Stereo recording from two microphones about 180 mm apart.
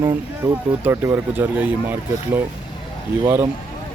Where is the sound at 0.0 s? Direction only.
20° right (ahead or behind).